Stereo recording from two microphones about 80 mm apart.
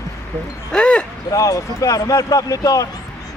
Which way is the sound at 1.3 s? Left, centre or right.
Left.